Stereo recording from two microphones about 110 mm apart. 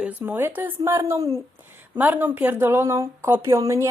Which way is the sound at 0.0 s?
15° right (ahead or behind).